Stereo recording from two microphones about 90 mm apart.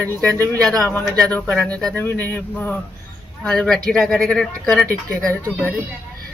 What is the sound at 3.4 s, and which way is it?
Speech, 5° left (ahead or behind).